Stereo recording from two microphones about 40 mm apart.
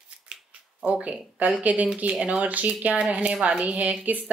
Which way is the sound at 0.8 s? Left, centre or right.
Right.